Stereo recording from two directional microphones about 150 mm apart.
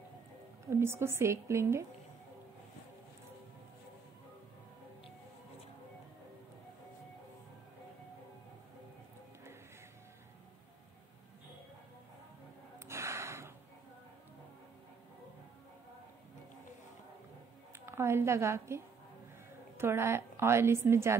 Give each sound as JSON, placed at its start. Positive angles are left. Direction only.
{"t": 0.7, "sound": "a woman's voice", "side_deg": -15}
{"t": 12.8, "sound": "gasp", "side_deg": -20}
{"t": 17.7, "sound": "a sound", "side_deg": -15}
{"t": 19.8, "sound": "a woman's voice", "side_deg": -15}